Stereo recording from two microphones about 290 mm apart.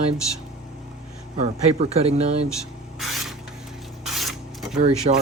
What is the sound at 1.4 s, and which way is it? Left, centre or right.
Speech, right.